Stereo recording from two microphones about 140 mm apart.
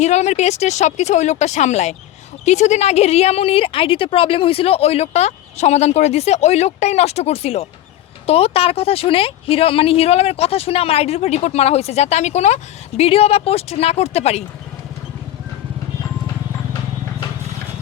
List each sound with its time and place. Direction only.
0.0 s speech: 55° left (ahead or behind)